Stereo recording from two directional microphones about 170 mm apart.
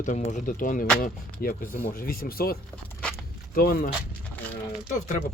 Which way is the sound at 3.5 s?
60° left (ahead or behind).